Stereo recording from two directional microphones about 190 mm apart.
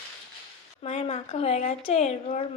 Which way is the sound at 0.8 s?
35° left (ahead or behind).